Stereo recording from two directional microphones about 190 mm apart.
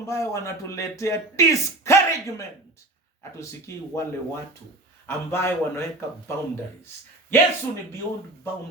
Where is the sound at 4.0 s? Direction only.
15° left (ahead or behind).